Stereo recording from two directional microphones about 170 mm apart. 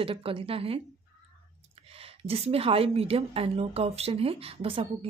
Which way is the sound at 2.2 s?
35° right (ahead or behind).